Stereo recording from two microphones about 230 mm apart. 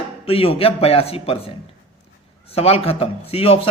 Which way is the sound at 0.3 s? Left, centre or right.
Left.